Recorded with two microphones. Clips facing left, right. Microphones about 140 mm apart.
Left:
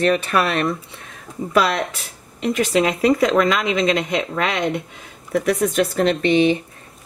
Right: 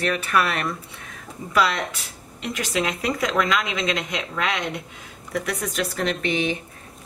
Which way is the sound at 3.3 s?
45° left (ahead or behind).